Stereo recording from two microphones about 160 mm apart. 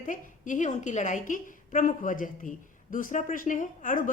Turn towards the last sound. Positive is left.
turn(degrees=55)  # may be behind; listen again after turning